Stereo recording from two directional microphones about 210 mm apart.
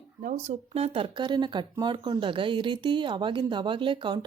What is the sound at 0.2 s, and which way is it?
Speech, 35° right (ahead or behind).